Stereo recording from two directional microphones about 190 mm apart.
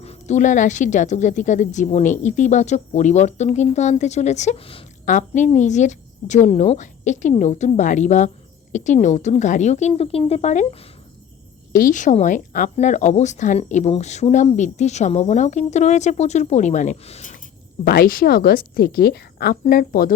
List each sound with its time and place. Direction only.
0.0 s speech: 35° left (ahead or behind)
17.8 s a woman's voice: 50° left (ahead or behind)